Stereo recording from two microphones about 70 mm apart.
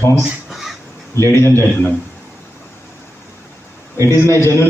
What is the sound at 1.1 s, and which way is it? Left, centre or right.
Speech, left.